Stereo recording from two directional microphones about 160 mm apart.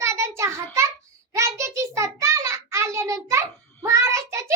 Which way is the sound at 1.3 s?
20° right (ahead or behind).